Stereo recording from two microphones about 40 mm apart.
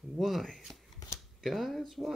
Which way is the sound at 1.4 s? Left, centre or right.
Centre.